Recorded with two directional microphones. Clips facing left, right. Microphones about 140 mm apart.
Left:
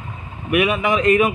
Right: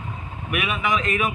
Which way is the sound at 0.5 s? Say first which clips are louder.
Left 7 dB; 40° left (ahead or behind).